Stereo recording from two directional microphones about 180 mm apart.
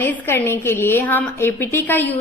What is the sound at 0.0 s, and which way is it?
A woman's voice, 10° left (ahead or behind).